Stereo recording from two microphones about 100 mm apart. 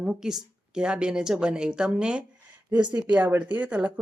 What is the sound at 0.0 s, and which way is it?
A woman's voice, 5° right (ahead or behind).